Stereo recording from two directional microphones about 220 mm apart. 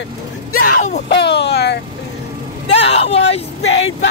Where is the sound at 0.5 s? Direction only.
30° left (ahead or behind).